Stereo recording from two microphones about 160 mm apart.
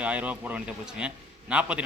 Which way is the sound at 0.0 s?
10° right (ahead or behind).